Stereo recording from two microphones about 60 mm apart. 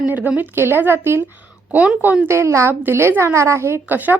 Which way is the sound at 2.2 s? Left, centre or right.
Right.